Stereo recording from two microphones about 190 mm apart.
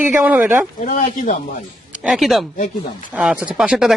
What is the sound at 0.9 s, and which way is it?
Speech, 45° left (ahead or behind).